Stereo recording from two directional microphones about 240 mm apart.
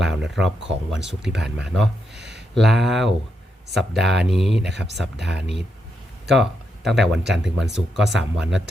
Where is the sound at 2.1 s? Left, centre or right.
Right.